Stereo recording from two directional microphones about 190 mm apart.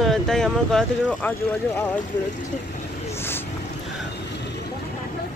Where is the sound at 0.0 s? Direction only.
Centre (ahead or behind).